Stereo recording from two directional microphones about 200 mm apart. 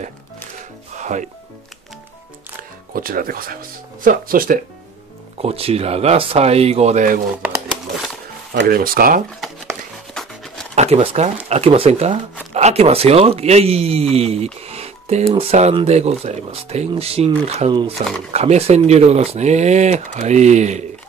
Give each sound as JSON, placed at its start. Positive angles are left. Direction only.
{"t": 0.9, "sound": "music", "side_deg": -35}
{"t": 2.9, "sound": "speech", "side_deg": -45}
{"t": 5.4, "sound": "speech", "side_deg": -30}
{"t": 8.5, "sound": "speech", "side_deg": -50}
{"t": 9.4, "sound": "a sound", "side_deg": 0}
{"t": 10.7, "sound": "a sound", "side_deg": -35}
{"t": 11.4, "sound": "speech", "side_deg": -30}